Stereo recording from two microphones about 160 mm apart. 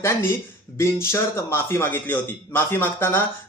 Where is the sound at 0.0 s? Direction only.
15° left (ahead or behind).